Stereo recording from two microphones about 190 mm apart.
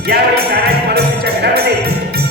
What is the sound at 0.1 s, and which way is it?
Music, 55° right (ahead or behind).